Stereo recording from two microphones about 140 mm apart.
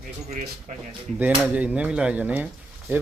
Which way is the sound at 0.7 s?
60° right (ahead or behind).